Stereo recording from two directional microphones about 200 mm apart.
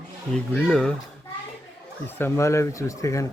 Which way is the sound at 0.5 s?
5° left (ahead or behind).